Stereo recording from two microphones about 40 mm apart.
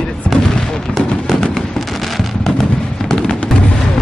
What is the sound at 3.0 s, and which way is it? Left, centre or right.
Music, centre.